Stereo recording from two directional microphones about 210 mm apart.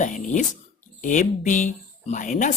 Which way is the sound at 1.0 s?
35° left (ahead or behind).